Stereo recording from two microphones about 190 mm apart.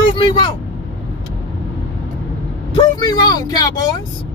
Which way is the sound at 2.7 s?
20° left (ahead or behind).